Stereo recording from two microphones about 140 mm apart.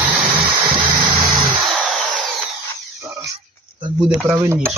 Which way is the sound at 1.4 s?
Centre (ahead or behind).